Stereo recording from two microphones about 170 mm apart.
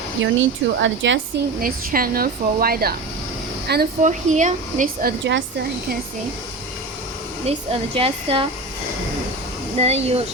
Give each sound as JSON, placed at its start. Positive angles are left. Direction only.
{"t": 0.2, "sound": "speech", "side_deg": -90}
{"t": 1.6, "sound": "speech", "side_deg": -55}
{"t": 3.7, "sound": "speech", "side_deg": -75}
{"t": 4.0, "sound": "speech", "side_deg": -45}
{"t": 7.4, "sound": "speech", "side_deg": -35}
{"t": 9.7, "sound": "speech", "side_deg": -35}